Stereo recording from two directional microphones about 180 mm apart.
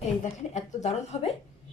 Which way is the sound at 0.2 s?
40° left (ahead or behind).